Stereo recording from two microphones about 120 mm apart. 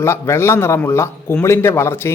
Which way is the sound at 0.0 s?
20° left (ahead or behind).